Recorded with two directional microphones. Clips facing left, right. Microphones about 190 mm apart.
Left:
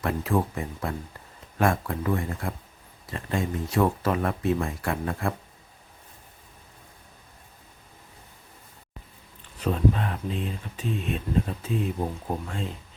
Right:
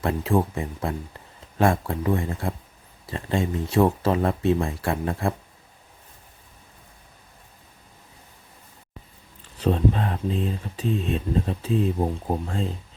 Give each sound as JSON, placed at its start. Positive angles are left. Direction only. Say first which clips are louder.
{"t": 0.0, "sound": "speech", "louder": "right 3 dB", "side_deg": -25}
{"t": 9.6, "sound": "speech", "louder": "right 2 dB", "side_deg": -30}